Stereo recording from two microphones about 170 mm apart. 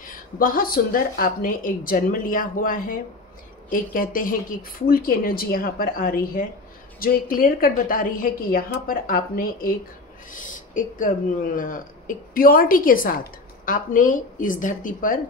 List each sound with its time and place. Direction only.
0.0 s a woman's voice: 55° left (ahead or behind)